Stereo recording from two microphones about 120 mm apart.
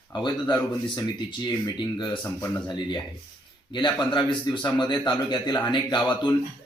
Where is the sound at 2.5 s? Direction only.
40° left (ahead or behind).